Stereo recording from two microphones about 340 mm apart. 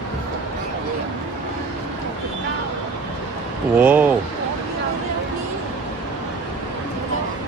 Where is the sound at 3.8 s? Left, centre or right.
Centre.